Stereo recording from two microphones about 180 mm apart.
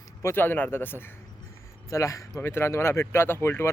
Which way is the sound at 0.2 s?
15° left (ahead or behind).